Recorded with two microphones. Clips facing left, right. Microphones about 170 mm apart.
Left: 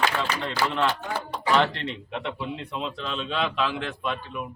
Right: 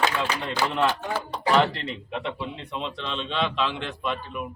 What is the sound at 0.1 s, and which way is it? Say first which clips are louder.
Speech: right 1 dB; 50° left (ahead or behind).